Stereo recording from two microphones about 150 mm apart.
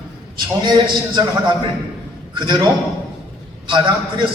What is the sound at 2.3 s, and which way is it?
Speech, 30° right (ahead or behind).